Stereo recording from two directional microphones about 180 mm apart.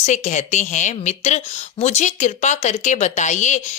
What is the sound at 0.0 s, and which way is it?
A woman's voice, 40° left (ahead or behind).